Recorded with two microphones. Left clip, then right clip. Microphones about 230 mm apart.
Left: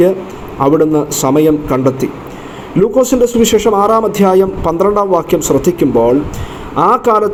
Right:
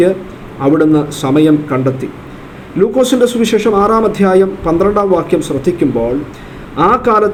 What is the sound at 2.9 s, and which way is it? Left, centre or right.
A man's voice, centre.